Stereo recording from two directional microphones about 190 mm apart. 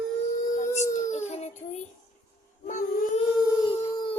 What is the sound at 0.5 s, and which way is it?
Dog, 40° left (ahead or behind).